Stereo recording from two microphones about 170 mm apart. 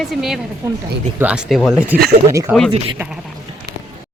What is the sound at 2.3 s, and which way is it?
Speech, 15° right (ahead or behind).